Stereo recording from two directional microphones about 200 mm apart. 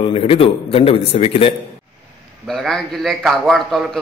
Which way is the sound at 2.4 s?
Centre (ahead or behind).